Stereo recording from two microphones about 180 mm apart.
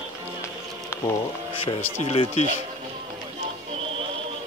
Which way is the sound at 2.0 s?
35° left (ahead or behind).